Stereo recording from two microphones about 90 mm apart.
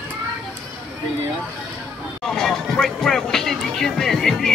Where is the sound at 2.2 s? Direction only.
5° left (ahead or behind).